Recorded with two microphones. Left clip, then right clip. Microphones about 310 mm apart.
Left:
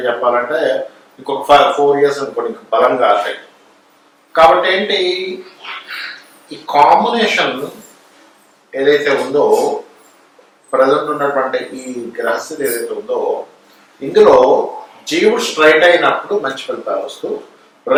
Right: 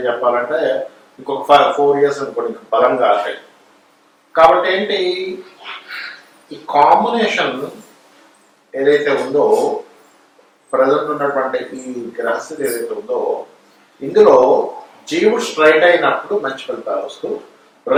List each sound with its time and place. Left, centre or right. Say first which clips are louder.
0.0 s a man's voice: left 2 dB; centre
4.4 s a man's voice: left 1 dB; centre
6.7 s speech: left 2 dB; centre
7.0 s a man's voice: left 2 dB; centre
8.7 s a man's voice: left 1 dB; centre
9.1 s speech: left 1 dB; centre
10.7 s a man's voice: left 2 dB; centre
12.9 s speech: left 2 dB; right
15.0 s a man's voice: left 2 dB; centre; by 17.4 s right